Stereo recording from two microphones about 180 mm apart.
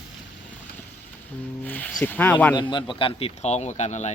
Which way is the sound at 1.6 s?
10° left (ahead or behind).